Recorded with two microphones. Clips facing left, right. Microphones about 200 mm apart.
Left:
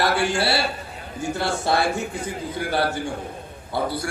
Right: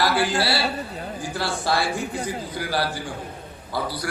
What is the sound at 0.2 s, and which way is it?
A man's voice, 25° left (ahead or behind).